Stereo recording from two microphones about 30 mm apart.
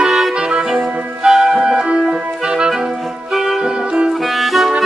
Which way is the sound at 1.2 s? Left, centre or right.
Centre.